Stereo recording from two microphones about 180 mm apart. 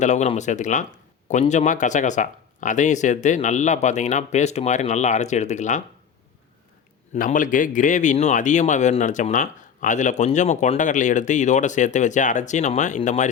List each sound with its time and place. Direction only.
0.0 s speech: 40° left (ahead or behind)
7.1 s a man's voice: 45° left (ahead or behind)